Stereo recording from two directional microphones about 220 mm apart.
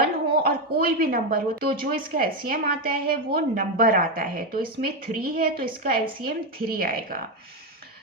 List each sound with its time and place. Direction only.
0.0 s speech: 40° right (ahead or behind)